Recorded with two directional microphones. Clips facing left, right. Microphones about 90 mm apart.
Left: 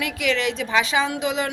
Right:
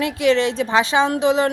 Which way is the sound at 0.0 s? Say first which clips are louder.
Right 6 dB; 30° right (ahead or behind).